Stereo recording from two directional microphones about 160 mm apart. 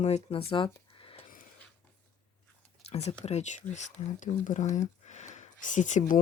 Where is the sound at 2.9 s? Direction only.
40° left (ahead or behind).